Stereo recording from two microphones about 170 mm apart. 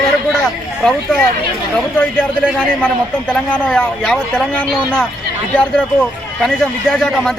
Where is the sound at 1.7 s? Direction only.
5° left (ahead or behind).